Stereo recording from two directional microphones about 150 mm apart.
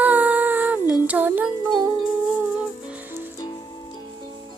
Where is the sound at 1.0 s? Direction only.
10° right (ahead or behind).